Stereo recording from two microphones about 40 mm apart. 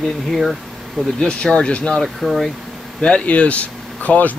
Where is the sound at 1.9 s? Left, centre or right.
Centre.